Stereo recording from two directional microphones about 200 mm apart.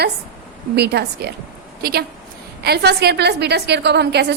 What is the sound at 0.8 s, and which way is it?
A woman's voice, 55° right (ahead or behind).